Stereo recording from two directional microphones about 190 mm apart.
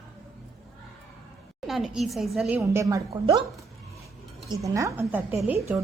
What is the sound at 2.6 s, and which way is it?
Speech, 15° right (ahead or behind).